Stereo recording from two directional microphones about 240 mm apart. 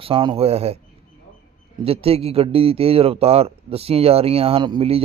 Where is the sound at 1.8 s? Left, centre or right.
Right.